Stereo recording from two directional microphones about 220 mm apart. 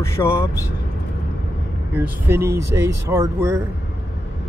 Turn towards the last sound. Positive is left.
turn(degrees=-15)  # may be behind; listen again after turning